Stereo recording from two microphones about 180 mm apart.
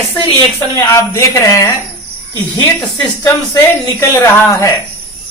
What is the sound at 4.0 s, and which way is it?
Speech, 15° left (ahead or behind).